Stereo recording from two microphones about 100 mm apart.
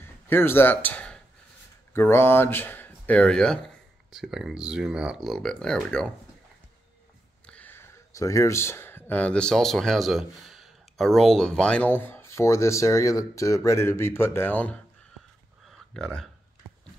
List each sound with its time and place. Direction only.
0.0 s a man's voice: 20° left (ahead or behind)
2.0 s speech: 25° left (ahead or behind); by 3.7 s 5° left (ahead or behind)
4.1 s speech: 5° right (ahead or behind)
7.4 s speech: 15° left (ahead or behind)
15.6 s a sound: 5° left (ahead or behind)